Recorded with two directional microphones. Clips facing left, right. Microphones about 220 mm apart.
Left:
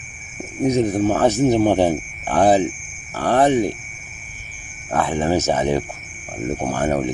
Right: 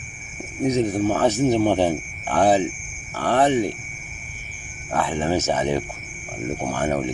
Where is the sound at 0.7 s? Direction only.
45° left (ahead or behind).